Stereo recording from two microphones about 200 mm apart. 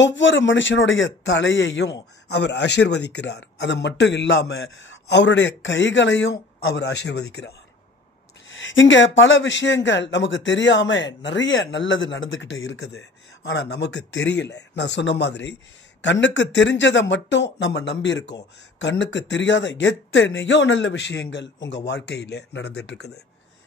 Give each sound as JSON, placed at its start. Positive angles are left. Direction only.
{"t": 0.0, "sound": "a man's voice", "side_deg": 65}
{"t": 8.5, "sound": "a man's voice", "side_deg": 70}